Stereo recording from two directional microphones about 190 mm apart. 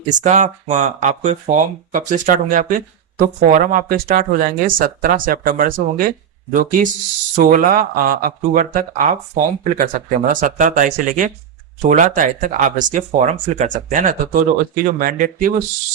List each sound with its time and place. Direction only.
0.1 s speech: 40° right (ahead or behind)